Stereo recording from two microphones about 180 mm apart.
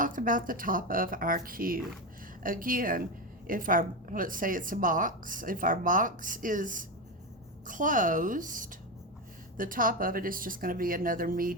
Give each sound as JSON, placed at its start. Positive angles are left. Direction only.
{"t": 0.0, "sound": "a woman's voice", "side_deg": -50}